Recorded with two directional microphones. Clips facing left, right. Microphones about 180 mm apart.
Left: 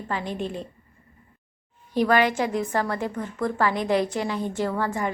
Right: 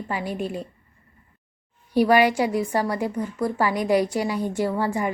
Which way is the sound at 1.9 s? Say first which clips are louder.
Right 3 dB; 10° right (ahead or behind).